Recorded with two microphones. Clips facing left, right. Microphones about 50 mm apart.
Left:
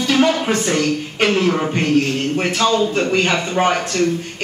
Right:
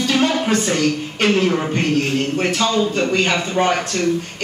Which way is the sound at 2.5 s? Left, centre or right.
Left.